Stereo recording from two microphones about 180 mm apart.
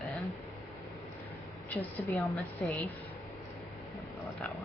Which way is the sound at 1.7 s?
10° left (ahead or behind).